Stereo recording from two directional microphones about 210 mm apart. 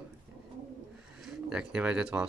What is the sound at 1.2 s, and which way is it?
Speech, 5° right (ahead or behind).